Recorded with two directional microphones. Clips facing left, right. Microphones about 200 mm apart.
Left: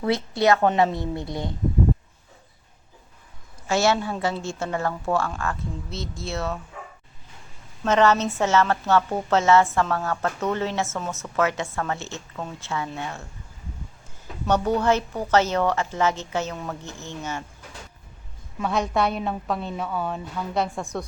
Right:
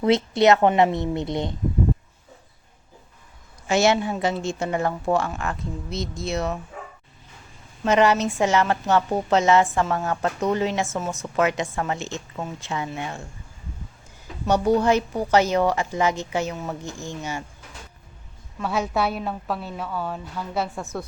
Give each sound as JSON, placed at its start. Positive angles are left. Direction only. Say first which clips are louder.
{"t": 0.0, "sound": "speech", "louder": "right 4 dB", "side_deg": -20}
{"t": 3.7, "sound": "a woman's voice", "louder": "right 2 dB", "side_deg": -20}
{"t": 7.9, "sound": "a woman's voice", "louder": "right 1 dB", "side_deg": -10}
{"t": 14.4, "sound": "a woman's voice", "louder": "right 2 dB", "side_deg": -10}
{"t": 18.6, "sound": "a woman's voice", "louder": "left 1 dB", "side_deg": -5}